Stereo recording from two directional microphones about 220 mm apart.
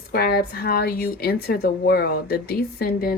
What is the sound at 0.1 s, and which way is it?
A woman's voice, 45° left (ahead or behind).